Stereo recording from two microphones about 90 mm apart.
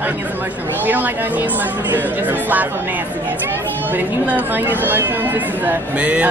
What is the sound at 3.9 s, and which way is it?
Speech, 20° right (ahead or behind).